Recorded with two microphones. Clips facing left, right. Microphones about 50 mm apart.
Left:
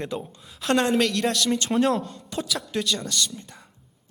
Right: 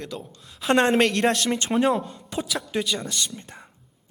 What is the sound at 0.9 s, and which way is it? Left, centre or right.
Speech, right.